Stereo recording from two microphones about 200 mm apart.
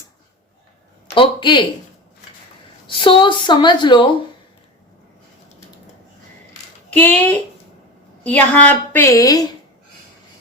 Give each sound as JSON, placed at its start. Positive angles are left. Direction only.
{"t": 1.1, "sound": "a sound", "side_deg": 25}
{"t": 2.8, "sound": "speech", "side_deg": 25}
{"t": 6.9, "sound": "a woman's voice", "side_deg": 10}